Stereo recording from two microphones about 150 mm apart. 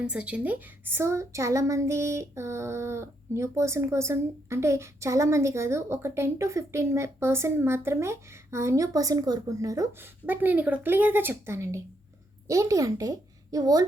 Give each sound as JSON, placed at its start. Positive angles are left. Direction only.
{"t": 0.0, "sound": "a woman's voice", "side_deg": -5}